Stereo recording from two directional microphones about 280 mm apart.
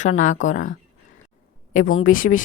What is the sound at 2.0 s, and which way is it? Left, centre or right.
Speech, left.